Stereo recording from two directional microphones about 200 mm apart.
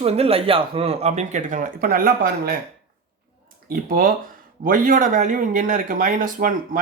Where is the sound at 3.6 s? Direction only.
45° right (ahead or behind).